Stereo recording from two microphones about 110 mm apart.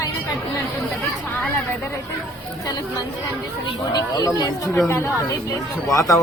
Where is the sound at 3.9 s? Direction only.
35° left (ahead or behind).